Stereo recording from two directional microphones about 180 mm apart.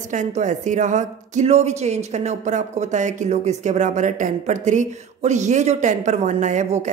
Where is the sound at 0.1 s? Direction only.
45° right (ahead or behind).